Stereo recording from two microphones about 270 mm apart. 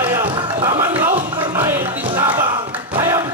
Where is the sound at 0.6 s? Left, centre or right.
Centre.